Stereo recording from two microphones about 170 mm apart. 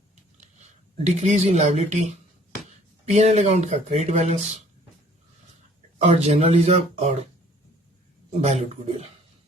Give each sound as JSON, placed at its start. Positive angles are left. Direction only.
{"t": 1.0, "sound": "speech", "side_deg": -40}
{"t": 6.0, "sound": "speech", "side_deg": -40}
{"t": 8.3, "sound": "speech", "side_deg": -40}